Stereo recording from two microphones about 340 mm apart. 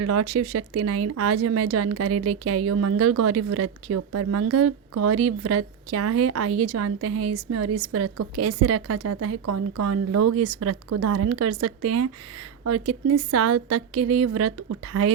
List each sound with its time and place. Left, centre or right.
0.0 s speech: right